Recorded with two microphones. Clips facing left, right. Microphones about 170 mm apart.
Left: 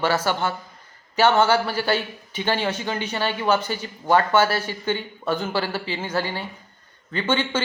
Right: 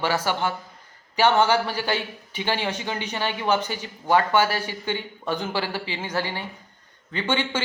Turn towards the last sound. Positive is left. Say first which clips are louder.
# left 2 dB
turn(degrees=-15)  # may be behind; listen again after turning